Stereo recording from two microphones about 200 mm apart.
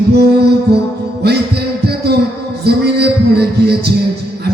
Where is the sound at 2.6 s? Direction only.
55° right (ahead or behind).